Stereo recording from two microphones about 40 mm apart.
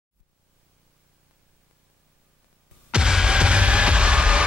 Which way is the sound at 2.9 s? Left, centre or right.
Centre.